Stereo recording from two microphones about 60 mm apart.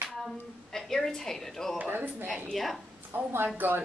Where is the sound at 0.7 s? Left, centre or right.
Centre.